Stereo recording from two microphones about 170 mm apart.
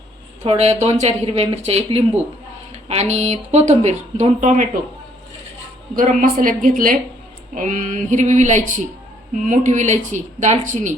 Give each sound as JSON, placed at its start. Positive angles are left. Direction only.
{"t": 0.4, "sound": "speech", "side_deg": -40}
{"t": 6.0, "sound": "a woman's voice", "side_deg": -55}